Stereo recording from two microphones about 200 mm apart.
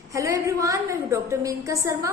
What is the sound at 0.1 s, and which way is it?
A woman's voice, 15° right (ahead or behind).